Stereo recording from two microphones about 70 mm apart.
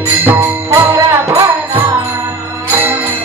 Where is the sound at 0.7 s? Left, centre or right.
Right.